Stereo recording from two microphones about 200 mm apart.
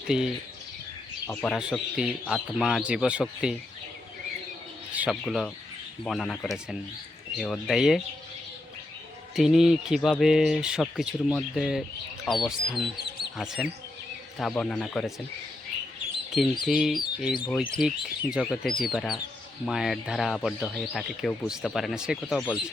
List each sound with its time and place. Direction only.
0.1 s speech: 5° right (ahead or behind)
1.3 s speech: 5° left (ahead or behind)
4.9 s speech: 5° right (ahead or behind)
9.3 s speech: centre (ahead or behind)
16.6 s speech: centre (ahead or behind)